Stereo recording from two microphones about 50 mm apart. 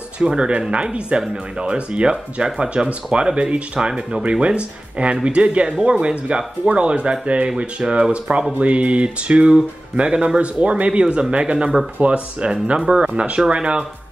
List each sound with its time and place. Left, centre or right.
0.3 s speech: centre